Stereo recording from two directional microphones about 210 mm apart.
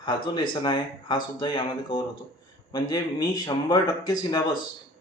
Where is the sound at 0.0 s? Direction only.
20° left (ahead or behind).